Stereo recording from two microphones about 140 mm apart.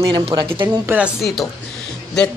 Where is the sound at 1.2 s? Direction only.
Centre (ahead or behind).